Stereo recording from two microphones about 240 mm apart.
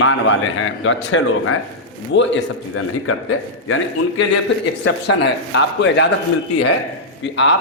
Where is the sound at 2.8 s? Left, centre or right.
Left.